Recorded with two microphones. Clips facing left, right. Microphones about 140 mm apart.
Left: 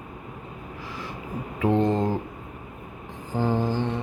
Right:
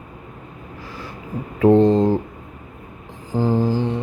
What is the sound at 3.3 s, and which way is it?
Music, 10° right (ahead or behind).